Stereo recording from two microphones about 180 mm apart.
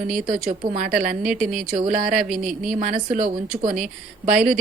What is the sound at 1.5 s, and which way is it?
Speech, 50° right (ahead or behind).